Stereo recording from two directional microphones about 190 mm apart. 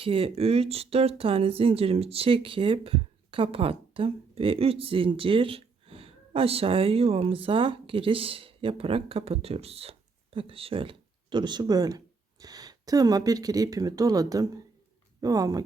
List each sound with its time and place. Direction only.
0.0 s speech: 30° right (ahead or behind)